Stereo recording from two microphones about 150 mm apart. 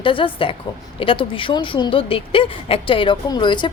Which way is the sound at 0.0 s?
35° left (ahead or behind).